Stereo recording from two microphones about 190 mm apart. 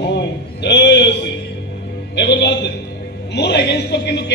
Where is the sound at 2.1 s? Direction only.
65° left (ahead or behind).